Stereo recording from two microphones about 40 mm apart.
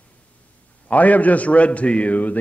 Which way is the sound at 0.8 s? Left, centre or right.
Left.